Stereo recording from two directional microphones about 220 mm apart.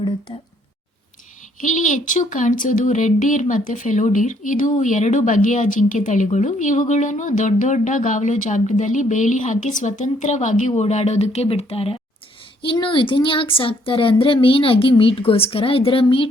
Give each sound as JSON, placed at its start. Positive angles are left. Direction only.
{"t": 1.6, "sound": "speech", "side_deg": 35}